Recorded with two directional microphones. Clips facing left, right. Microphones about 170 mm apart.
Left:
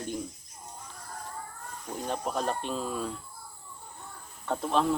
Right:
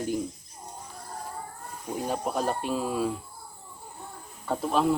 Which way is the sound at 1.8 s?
10° right (ahead or behind).